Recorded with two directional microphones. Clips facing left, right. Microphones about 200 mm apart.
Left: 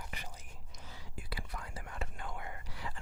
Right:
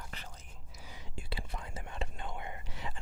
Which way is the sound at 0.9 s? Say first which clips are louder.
Right 2 dB; 25° right (ahead or behind).